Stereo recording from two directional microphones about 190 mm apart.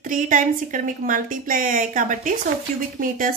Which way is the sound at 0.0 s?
45° right (ahead or behind).